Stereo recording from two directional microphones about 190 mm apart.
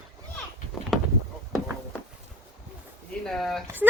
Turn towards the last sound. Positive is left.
turn(degrees=0)  # may be behind; listen again after turning